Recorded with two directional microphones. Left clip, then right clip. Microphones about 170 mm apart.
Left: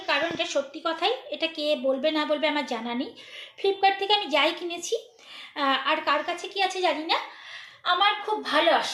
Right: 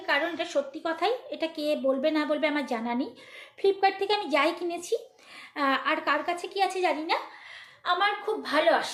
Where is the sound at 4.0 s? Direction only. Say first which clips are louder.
Left 2 dB; 50° right (ahead or behind).